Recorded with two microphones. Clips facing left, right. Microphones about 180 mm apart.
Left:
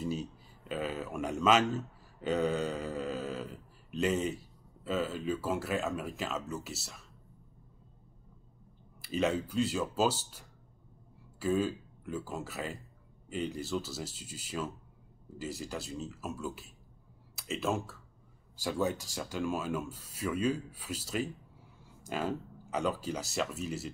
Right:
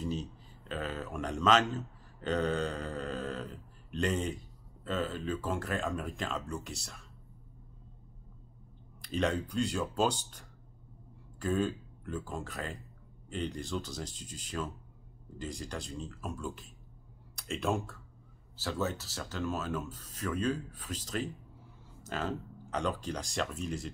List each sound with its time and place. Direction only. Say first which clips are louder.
0.0 s speech: left 1 dB; 10° left (ahead or behind)
9.0 s speech: left 1 dB; 5° left (ahead or behind)
18.6 s speech: left 2 dB; 15° left (ahead or behind)